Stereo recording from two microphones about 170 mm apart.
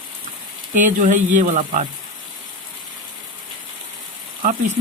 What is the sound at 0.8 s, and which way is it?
Speech, 50° right (ahead or behind).